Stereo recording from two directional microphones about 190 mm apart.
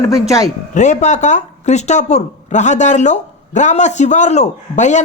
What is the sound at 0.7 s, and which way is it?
A man's voice, 40° left (ahead or behind).